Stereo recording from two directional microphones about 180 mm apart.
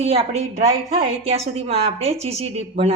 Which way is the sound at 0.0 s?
35° right (ahead or behind).